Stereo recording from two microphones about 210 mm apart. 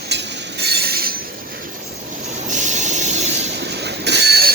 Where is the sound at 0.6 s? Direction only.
50° right (ahead or behind).